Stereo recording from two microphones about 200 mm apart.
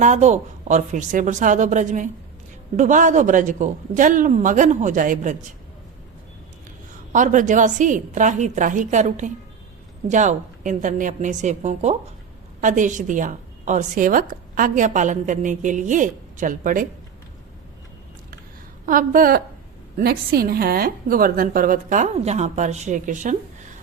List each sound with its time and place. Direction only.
0.0 s a woman's voice: 35° right (ahead or behind)
7.1 s a woman's voice: 40° right (ahead or behind)
18.9 s a woman's voice: 45° right (ahead or behind)